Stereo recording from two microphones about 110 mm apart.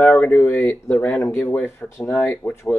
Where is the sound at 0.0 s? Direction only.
15° left (ahead or behind).